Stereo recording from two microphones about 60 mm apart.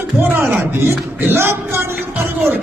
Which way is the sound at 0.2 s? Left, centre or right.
Right.